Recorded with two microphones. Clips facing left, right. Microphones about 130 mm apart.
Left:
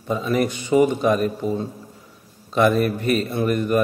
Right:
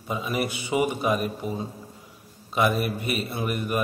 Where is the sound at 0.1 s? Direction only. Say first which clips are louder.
Left 6 dB; 10° right (ahead or behind).